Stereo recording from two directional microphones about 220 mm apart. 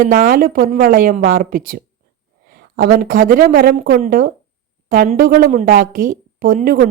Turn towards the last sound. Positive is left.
turn(degrees=-45)  # may be behind; listen again after turning